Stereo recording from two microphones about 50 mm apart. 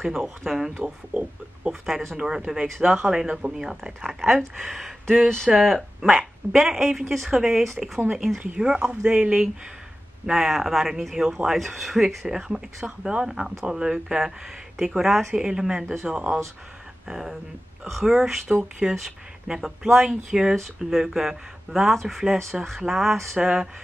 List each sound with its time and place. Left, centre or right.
0.0 s speech: centre
0.8 s a sound: centre
1.7 s speech: centre
4.6 s speech: centre
12.4 s speech: centre
15.8 s speech: centre
16.1 s a sound: centre
17.1 s speech: centre
23.4 s speech: centre